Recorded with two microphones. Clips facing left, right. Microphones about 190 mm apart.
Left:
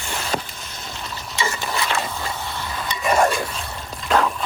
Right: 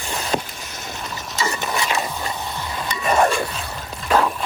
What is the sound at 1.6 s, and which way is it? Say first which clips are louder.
Stir: right 1 dB; 20° right (ahead or behind).